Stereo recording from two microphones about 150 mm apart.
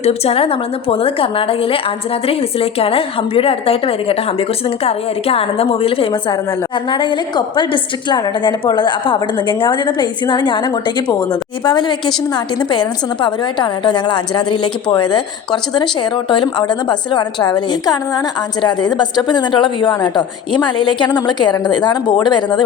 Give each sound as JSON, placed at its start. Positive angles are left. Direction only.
{"t": 0.0, "sound": "a woman's voice", "side_deg": 40}